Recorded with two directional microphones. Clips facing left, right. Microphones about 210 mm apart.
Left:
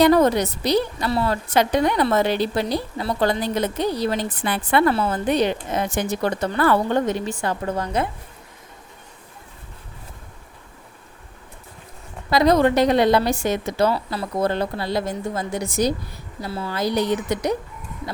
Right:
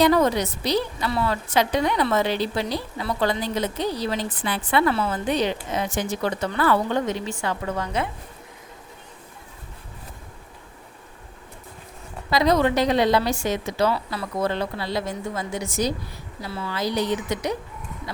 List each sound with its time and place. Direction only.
0.0 s a woman's voice: 50° left (ahead or behind)
1.1 s speech: 35° left (ahead or behind)
1.5 s a woman's voice: 50° left (ahead or behind)
3.0 s a woman's voice: 40° left (ahead or behind)
5.2 s a woman's voice: 50° left (ahead or behind)
12.3 s a woman's voice: 55° left (ahead or behind)
13.9 s speech: 35° left (ahead or behind)
14.4 s a woman's voice: 45° left (ahead or behind)